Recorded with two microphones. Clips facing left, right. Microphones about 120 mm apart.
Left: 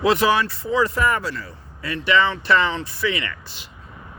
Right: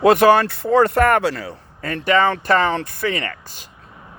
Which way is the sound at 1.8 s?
45° right (ahead or behind).